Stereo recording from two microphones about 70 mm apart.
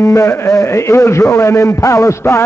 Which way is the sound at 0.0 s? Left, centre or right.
Left.